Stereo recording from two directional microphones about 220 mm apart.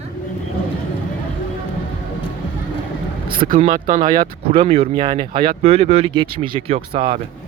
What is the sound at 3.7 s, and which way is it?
Speech, 35° right (ahead or behind).